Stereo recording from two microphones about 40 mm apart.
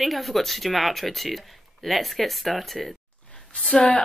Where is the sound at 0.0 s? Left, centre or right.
Centre.